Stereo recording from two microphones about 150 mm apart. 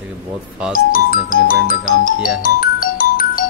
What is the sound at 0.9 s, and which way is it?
Speech, 70° left (ahead or behind).